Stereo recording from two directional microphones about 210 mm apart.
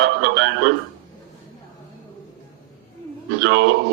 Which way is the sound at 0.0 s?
55° right (ahead or behind).